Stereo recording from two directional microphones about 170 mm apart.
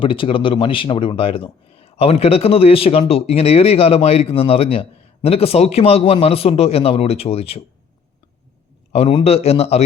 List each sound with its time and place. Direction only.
0.0 s a man's voice: 30° left (ahead or behind)
8.9 s a man's voice: 35° left (ahead or behind)